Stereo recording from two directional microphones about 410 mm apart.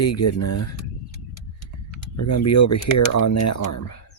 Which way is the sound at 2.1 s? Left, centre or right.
Left.